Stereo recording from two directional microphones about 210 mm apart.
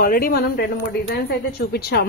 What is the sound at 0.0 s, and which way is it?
Speech, 45° left (ahead or behind).